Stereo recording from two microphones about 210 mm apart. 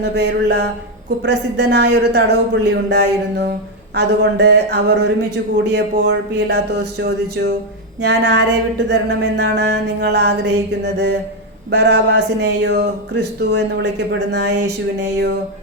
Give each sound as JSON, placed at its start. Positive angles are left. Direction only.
{"t": 0.0, "sound": "speech", "side_deg": -55}